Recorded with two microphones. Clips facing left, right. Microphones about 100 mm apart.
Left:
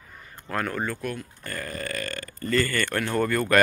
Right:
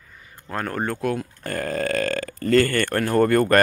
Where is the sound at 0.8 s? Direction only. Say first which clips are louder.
Right 6 dB; 75° right (ahead or behind).